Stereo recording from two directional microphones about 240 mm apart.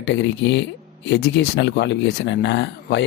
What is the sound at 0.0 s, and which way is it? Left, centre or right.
Speech, left.